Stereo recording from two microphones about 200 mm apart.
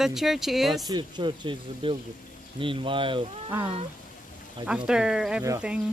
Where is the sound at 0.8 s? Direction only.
20° right (ahead or behind).